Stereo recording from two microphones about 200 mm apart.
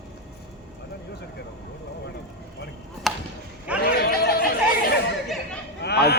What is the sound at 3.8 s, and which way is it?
Chatter, 50° left (ahead or behind).